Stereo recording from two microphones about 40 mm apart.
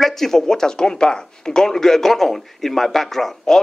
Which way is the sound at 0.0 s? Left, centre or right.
Centre.